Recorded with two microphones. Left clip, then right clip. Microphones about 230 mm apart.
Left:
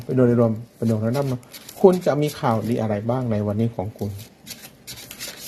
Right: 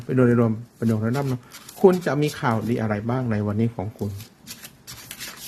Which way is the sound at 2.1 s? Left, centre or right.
Centre.